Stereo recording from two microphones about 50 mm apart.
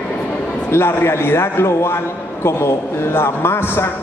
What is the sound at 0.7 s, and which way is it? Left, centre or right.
A man's voice, left.